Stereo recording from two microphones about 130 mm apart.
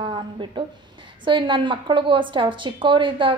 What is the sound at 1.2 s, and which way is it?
A woman's voice, 40° right (ahead or behind).